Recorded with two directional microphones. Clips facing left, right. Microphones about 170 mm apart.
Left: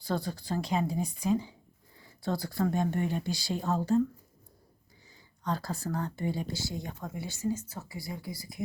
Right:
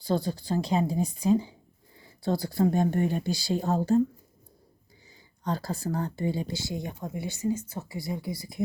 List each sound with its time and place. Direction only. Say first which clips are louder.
0.0 s speech: right 5 dB; 30° right (ahead or behind)
5.4 s speech: right 3 dB; 35° right (ahead or behind)